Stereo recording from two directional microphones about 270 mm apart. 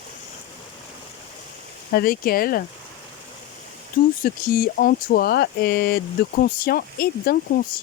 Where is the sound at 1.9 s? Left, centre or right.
Left.